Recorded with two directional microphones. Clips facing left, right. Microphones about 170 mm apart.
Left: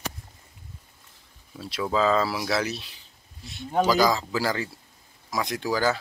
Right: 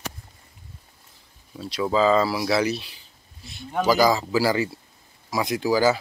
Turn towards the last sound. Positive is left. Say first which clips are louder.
# right 5 dB
turn(degrees=-10)  # may be behind; listen again after turning